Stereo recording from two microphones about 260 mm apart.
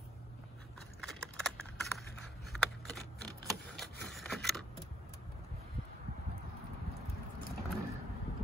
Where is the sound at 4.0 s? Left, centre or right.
Centre.